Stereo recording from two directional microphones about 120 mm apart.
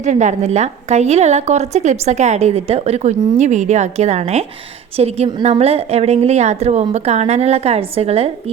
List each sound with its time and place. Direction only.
0.0 s a woman's voice: 90° right; by 8.3 s 55° right (ahead or behind)